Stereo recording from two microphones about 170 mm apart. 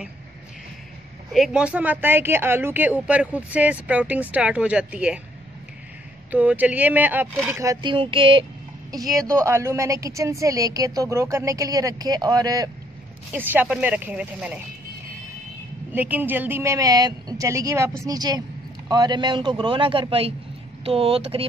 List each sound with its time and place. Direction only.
1.3 s speech: 5° right (ahead or behind)
6.3 s speech: 10° right (ahead or behind); by 8.5 s 30° right (ahead or behind)
9.4 s a woman's voice: 15° right (ahead or behind)
13.3 s speech: 10° right (ahead or behind)
15.9 s a woman's voice: 10° right (ahead or behind); by 21.5 s 35° right (ahead or behind)